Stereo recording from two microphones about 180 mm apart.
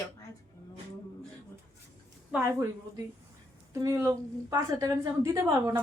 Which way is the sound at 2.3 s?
5° right (ahead or behind).